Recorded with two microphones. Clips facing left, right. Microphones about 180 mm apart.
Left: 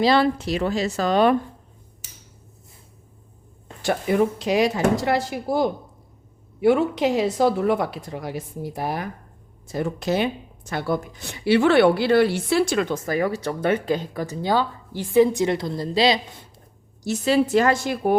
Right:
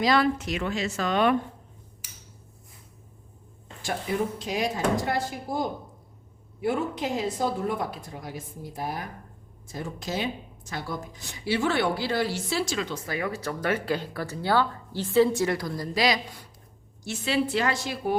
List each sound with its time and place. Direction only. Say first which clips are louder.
0.0 s speech: left 4 dB; 30° left (ahead or behind)
3.8 s a woman's voice: left 8 dB; 70° left (ahead or behind); by 13.9 s 25° left (ahead or behind)
13.9 s a woman's voice: left 4 dB; 15° left (ahead or behind)
17.0 s a woman's voice: left 7 dB; 40° left (ahead or behind)